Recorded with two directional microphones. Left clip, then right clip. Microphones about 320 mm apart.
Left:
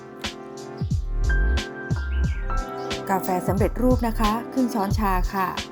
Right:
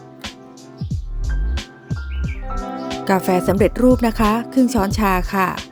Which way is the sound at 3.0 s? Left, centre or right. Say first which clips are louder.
Right 7 dB; right.